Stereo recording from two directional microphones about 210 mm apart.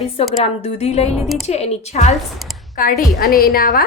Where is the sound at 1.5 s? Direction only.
30° left (ahead or behind).